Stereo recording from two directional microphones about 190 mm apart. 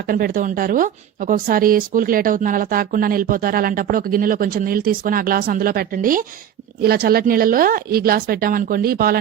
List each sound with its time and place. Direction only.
0.1 s a woman's voice: 45° right (ahead or behind)